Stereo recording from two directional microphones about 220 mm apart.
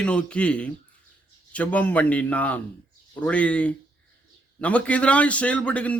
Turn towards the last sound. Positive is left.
turn(degrees=5)  # may be behind; listen again after turning